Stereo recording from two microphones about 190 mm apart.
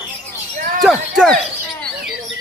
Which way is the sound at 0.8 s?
Centre (ahead or behind).